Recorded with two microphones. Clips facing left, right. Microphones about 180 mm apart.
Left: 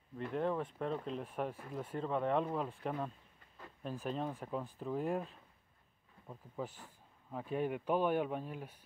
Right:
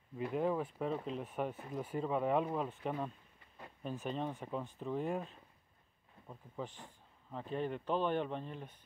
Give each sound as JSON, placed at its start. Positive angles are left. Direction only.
{"t": 0.2, "sound": "speech", "side_deg": -5}